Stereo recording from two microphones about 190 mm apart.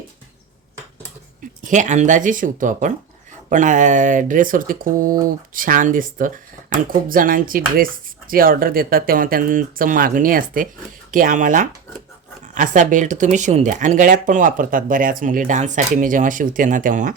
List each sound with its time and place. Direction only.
1.6 s speech: 40° right (ahead or behind)